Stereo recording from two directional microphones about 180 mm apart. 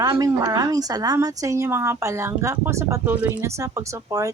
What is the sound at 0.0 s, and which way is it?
A woman's voice, 20° right (ahead or behind).